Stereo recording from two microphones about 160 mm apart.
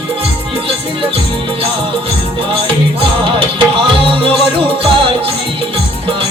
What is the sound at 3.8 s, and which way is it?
Music, 35° right (ahead or behind).